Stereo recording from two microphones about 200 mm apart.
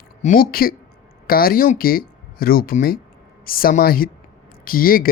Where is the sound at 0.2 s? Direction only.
40° left (ahead or behind).